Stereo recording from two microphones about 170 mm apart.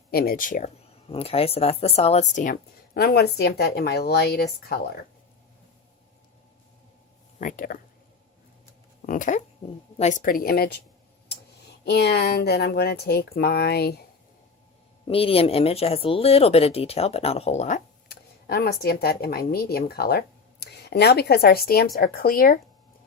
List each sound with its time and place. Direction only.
0.1 s speech: 65° left (ahead or behind)
1.0 s speech: 35° left (ahead or behind); by 4.8 s 70° left (ahead or behind)
7.3 s speech: 50° left (ahead or behind)
9.0 s speech: 50° left (ahead or behind)
11.9 s speech: 75° left (ahead or behind)
15.0 s speech: 35° left (ahead or behind)
18.1 s speech: 65° left (ahead or behind)